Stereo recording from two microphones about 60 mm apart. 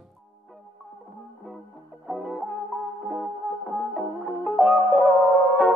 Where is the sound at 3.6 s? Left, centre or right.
Centre.